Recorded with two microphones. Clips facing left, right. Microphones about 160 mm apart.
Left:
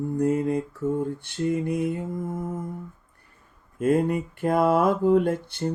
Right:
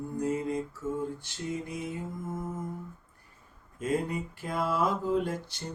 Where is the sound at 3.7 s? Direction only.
55° left (ahead or behind).